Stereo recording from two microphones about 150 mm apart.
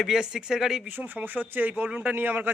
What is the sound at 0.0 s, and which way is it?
Speech, 5° right (ahead or behind).